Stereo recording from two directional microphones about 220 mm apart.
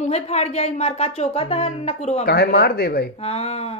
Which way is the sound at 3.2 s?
30° left (ahead or behind).